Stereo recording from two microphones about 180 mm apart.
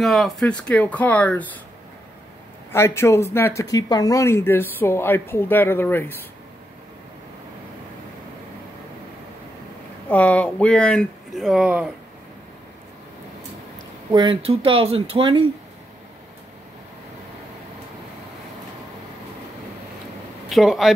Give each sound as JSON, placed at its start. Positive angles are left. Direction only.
{"t": 0.0, "sound": "speech", "side_deg": 0}
{"t": 2.7, "sound": "speech", "side_deg": 15}
{"t": 10.0, "sound": "speech", "side_deg": 10}
{"t": 14.1, "sound": "speech", "side_deg": -30}
{"t": 20.4, "sound": "a man's voice", "side_deg": 0}